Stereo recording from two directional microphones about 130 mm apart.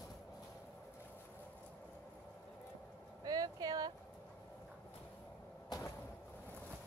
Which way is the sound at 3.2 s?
30° right (ahead or behind).